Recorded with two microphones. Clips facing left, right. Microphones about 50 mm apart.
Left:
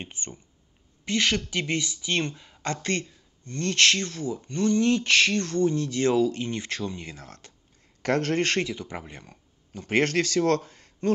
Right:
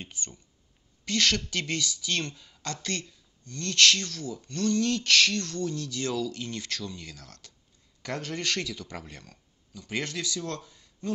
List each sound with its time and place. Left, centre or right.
0.0 s speech: left
8.0 s speech: left
8.5 s speech: left
9.7 s a man's voice: left